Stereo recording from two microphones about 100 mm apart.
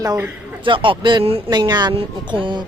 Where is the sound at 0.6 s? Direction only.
55° right (ahead or behind).